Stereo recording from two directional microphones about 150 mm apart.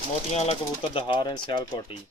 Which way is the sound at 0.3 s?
40° left (ahead or behind).